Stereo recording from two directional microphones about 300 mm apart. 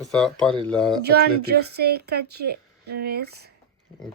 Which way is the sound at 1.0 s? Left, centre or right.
Right.